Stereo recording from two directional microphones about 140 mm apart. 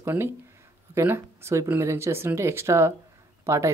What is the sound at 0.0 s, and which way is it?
Speech, 15° right (ahead or behind).